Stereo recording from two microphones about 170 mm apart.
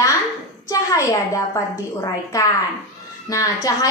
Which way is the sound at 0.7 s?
20° left (ahead or behind).